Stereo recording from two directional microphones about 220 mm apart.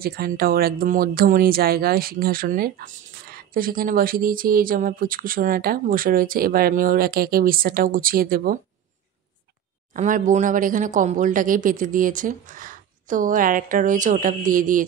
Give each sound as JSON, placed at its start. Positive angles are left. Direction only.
{"t": 0.0, "sound": "speech", "side_deg": -45}
{"t": 9.9, "sound": "speech", "side_deg": -35}